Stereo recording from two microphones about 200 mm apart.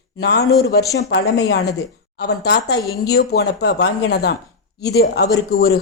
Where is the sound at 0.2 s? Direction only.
55° left (ahead or behind).